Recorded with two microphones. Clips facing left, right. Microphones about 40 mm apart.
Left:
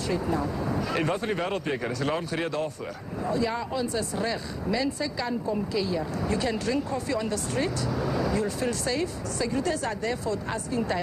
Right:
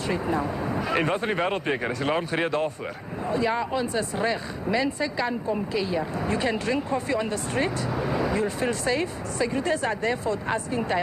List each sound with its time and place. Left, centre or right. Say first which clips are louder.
0.1 s speech: right 1 dB; right